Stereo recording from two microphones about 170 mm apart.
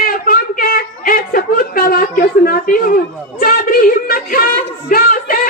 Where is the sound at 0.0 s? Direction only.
55° left (ahead or behind).